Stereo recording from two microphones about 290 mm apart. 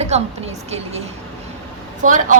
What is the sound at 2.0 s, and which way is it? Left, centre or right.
Speech, right.